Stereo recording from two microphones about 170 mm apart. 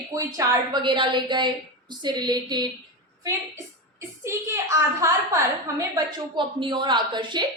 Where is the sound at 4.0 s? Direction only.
15° right (ahead or behind).